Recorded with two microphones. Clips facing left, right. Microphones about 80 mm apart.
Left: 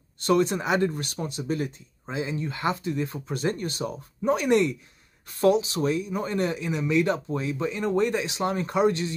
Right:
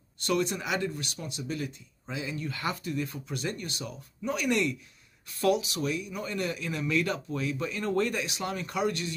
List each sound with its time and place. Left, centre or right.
0.2 s speech: left